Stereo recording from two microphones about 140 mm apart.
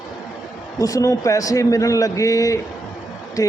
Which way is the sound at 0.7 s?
25° left (ahead or behind).